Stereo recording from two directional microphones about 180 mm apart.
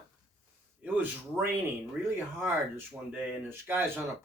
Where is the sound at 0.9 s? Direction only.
10° right (ahead or behind).